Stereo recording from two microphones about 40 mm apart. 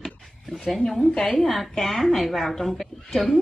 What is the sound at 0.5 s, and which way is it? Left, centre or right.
A woman's voice, centre.